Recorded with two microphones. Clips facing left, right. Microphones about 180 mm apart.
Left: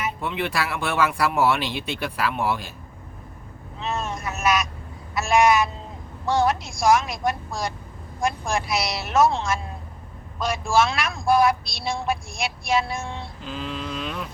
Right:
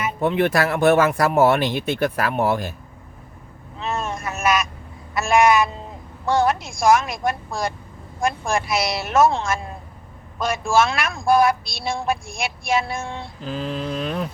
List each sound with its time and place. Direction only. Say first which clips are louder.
0.0 s speech: right 7 dB; 45° right (ahead or behind)
3.8 s vehicle: right 2 dB; 50° right (ahead or behind)
5.1 s a sound: right 2 dB; 55° right (ahead or behind)
6.2 s a woman's voice: right 2 dB; 50° right (ahead or behind)